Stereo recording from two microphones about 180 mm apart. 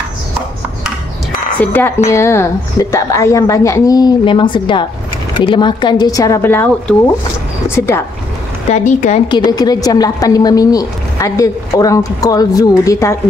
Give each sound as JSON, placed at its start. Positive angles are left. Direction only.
{"t": 1.6, "sound": "a woman's voice", "side_deg": 10}
{"t": 8.6, "sound": "speech", "side_deg": 40}
{"t": 9.5, "sound": "a woman's voice", "side_deg": 20}